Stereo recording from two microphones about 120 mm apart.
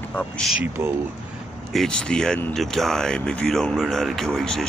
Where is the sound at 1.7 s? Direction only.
5° left (ahead or behind).